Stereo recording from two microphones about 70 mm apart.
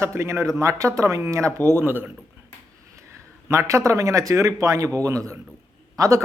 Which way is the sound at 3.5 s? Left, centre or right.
Right.